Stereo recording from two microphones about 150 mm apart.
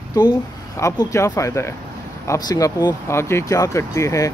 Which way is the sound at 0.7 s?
20° left (ahead or behind).